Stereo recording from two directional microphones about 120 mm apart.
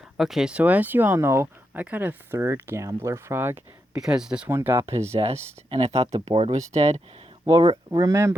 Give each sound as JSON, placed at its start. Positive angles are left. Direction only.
{"t": 0.2, "sound": "speech", "side_deg": -5}
{"t": 3.9, "sound": "speech", "side_deg": -5}
{"t": 4.4, "sound": "speech", "side_deg": -20}
{"t": 5.7, "sound": "speech", "side_deg": -60}
{"t": 7.5, "sound": "speech", "side_deg": -50}
{"t": 8.1, "sound": "speech", "side_deg": -20}